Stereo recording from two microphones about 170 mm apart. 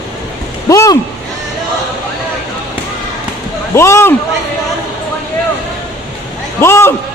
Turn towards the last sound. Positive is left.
turn(degrees=15)  # may be behind; listen again after turning